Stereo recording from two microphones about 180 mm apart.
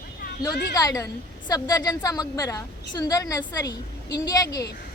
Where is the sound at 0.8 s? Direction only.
20° left (ahead or behind).